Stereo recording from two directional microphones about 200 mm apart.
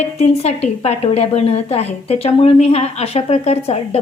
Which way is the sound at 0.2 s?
30° left (ahead or behind).